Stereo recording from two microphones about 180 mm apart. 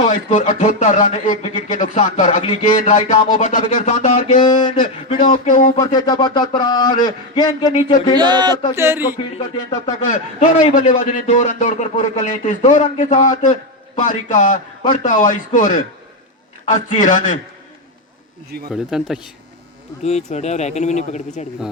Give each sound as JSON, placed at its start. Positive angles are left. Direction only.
{"t": 0.3, "sound": "a man's voice", "side_deg": 45}
{"t": 4.4, "sound": "a man's voice", "side_deg": 25}
{"t": 5.2, "sound": "a man's voice", "side_deg": 45}
{"t": 5.8, "sound": "a man's voice", "side_deg": 25}
{"t": 8.1, "sound": "speech", "side_deg": -25}
{"t": 8.7, "sound": "a sound", "side_deg": -15}
{"t": 10.1, "sound": "a man's voice", "side_deg": 45}
{"t": 18.7, "sound": "speech", "side_deg": -5}
{"t": 20.0, "sound": "speech", "side_deg": 35}